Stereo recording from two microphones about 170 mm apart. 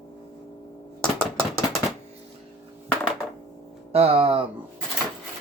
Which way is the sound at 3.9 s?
35° right (ahead or behind).